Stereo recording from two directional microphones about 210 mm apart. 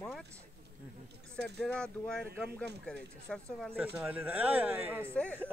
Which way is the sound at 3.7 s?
10° right (ahead or behind).